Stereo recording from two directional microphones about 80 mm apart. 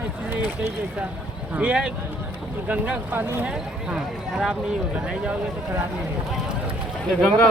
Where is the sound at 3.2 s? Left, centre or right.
Right.